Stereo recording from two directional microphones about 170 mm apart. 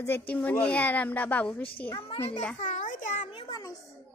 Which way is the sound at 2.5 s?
45° left (ahead or behind).